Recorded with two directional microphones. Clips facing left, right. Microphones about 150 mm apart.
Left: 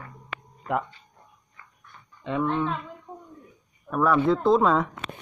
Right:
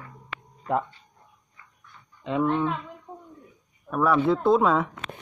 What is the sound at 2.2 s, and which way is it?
Speech, 20° right (ahead or behind).